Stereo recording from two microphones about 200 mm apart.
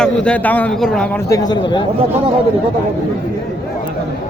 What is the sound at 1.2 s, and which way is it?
Speech, 20° left (ahead or behind).